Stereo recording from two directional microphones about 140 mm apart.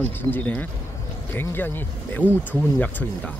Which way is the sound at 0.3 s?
15° left (ahead or behind).